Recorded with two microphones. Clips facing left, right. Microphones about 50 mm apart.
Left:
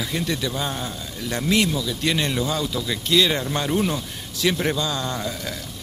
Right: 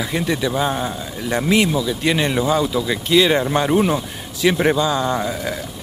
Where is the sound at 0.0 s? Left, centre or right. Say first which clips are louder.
Right 5 dB; centre.